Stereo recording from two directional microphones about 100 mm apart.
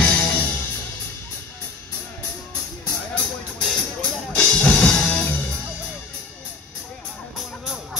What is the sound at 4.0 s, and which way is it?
Music, 15° left (ahead or behind).